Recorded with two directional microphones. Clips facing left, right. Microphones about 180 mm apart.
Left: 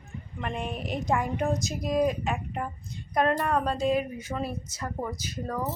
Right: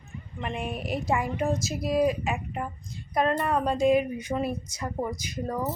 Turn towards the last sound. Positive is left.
turn(degrees=-15)  # may be behind; listen again after turning